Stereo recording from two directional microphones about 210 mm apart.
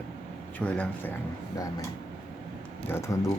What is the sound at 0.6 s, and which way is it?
Speech, 5° left (ahead or behind).